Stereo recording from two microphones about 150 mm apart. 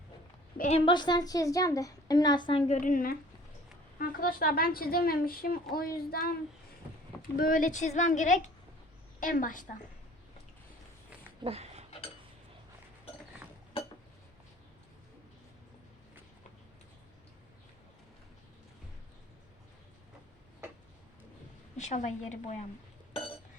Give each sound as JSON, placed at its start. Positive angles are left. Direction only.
{"t": 0.7, "sound": "a woman's voice", "side_deg": 35}
{"t": 2.8, "sound": "a woman's voice", "side_deg": 70}
{"t": 7.2, "sound": "speech", "side_deg": 70}
{"t": 11.4, "sound": "a sound", "side_deg": -45}
{"t": 21.8, "sound": "a woman's voice", "side_deg": 50}